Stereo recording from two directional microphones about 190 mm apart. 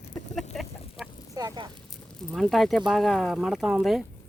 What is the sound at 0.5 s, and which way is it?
Chicken, centre (ahead or behind).